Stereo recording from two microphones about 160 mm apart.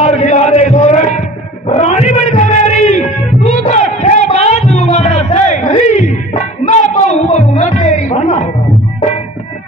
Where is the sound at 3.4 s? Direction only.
45° left (ahead or behind).